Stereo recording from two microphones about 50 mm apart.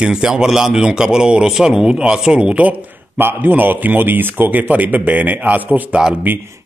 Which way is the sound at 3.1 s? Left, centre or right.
Right.